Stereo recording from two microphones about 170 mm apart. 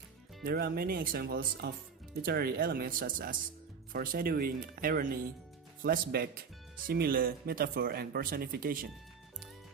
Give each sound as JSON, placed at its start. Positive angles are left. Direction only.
{"t": 0.4, "sound": "speech", "side_deg": -65}